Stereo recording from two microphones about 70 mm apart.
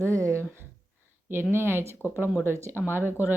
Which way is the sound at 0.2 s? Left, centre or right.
Right.